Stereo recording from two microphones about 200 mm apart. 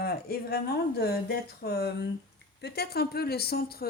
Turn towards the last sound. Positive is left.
turn(degrees=50)  # may be behind; listen again after turning